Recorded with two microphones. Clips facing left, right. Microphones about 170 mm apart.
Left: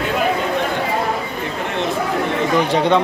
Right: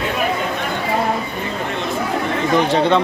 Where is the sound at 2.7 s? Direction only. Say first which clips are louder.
Left 1 dB; 15° left (ahead or behind).